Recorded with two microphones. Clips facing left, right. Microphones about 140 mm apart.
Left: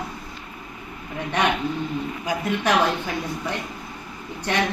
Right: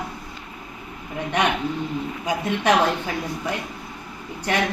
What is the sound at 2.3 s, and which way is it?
Speech, 20° right (ahead or behind).